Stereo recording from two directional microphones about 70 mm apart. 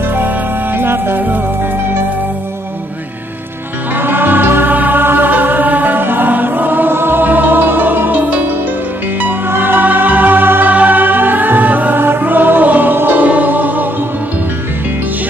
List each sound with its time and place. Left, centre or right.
0.7 s music: right
3.9 s music: right